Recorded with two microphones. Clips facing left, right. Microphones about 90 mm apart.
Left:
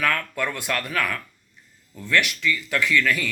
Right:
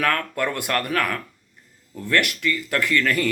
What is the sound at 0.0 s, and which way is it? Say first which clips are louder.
Speech: right 2 dB; 50° right (ahead or behind).